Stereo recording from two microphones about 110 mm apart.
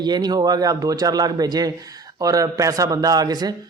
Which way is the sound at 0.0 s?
40° right (ahead or behind).